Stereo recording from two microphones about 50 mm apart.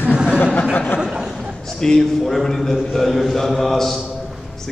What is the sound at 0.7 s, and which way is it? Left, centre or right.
Speech, left.